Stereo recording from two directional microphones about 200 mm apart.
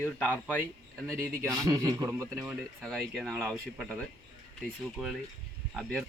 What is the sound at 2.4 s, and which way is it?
Speech, centre (ahead or behind).